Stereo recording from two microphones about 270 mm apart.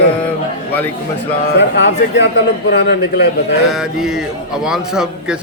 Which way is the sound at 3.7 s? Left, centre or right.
Centre.